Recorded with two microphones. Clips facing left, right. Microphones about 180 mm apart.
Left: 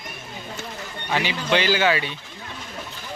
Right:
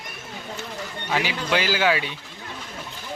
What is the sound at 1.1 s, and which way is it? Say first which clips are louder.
Speech: left 2 dB; 5° right (ahead or behind).